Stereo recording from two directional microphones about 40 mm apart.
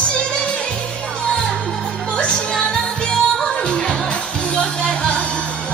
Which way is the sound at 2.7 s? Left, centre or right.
Left.